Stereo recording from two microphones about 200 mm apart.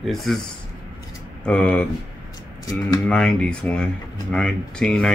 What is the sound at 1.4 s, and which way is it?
Speech, 5° left (ahead or behind).